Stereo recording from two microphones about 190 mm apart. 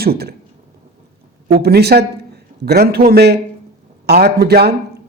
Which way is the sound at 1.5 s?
55° right (ahead or behind).